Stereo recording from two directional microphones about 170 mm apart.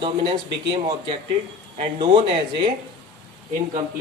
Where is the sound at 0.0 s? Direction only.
35° right (ahead or behind).